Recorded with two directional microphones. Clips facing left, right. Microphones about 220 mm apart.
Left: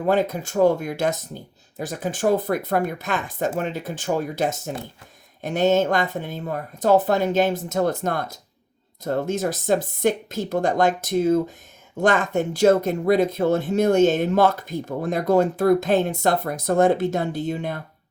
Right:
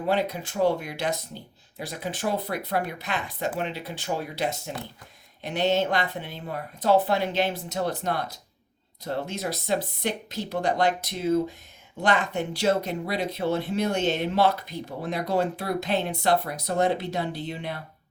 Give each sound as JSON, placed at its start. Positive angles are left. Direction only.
{"t": 0.0, "sound": "speech", "side_deg": 45}